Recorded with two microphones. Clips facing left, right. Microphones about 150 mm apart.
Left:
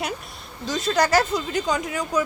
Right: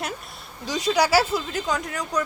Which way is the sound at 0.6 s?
10° right (ahead or behind).